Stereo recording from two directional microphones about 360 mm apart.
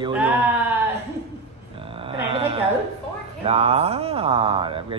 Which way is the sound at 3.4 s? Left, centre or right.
Centre.